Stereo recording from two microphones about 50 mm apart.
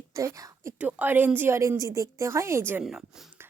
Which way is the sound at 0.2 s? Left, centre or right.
Right.